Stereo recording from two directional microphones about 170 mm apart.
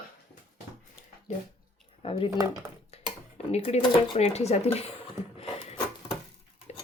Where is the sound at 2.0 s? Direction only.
30° left (ahead or behind).